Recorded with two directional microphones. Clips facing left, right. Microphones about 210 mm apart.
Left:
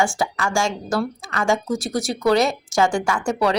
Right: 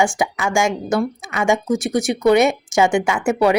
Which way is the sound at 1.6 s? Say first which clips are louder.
Right 5 dB; centre (ahead or behind).